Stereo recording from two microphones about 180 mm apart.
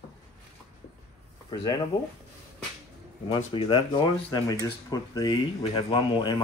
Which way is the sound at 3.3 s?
30° left (ahead or behind).